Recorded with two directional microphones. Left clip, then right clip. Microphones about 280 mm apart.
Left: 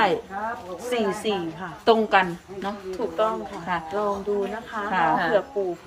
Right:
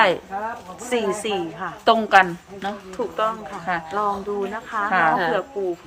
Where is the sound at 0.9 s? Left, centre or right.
Centre.